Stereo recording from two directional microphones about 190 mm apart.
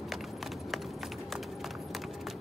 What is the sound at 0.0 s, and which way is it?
Run, centre (ahead or behind).